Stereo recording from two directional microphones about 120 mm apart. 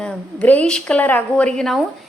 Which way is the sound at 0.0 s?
10° left (ahead or behind).